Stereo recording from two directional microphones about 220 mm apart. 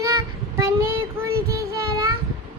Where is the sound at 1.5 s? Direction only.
15° right (ahead or behind).